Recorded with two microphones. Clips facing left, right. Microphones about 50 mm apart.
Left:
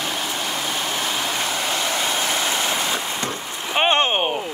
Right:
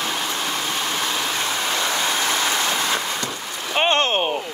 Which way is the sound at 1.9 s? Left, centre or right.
Left.